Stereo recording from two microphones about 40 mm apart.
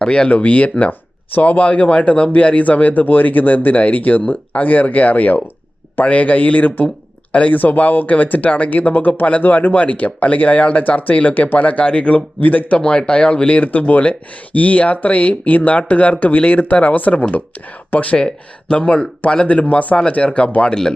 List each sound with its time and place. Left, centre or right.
0.0 s speech: left
11.9 s speech: left
12.4 s speech: left
18.7 s speech: left